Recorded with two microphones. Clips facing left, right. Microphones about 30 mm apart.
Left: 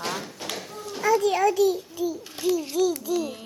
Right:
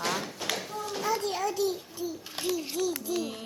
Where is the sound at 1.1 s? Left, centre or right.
Left.